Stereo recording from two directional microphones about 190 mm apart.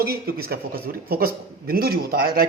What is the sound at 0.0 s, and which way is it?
A man's voice, 55° right (ahead or behind).